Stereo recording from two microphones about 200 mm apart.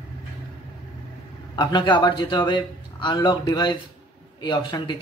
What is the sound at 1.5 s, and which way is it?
A man's voice, 20° left (ahead or behind).